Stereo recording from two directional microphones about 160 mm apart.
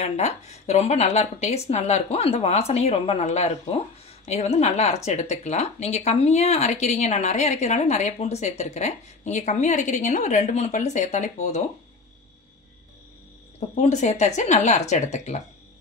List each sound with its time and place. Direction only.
0.0 s a woman's voice: 45° left (ahead or behind)
13.6 s speech: 45° left (ahead or behind)